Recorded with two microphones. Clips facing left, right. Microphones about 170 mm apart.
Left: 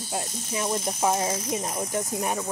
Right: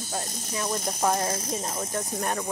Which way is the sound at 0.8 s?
5° left (ahead or behind).